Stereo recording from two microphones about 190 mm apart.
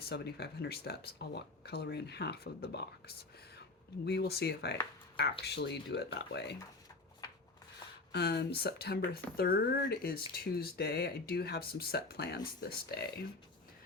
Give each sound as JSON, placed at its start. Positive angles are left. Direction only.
{"t": 0.0, "sound": "speech", "side_deg": 60}
{"t": 8.1, "sound": "speech", "side_deg": 60}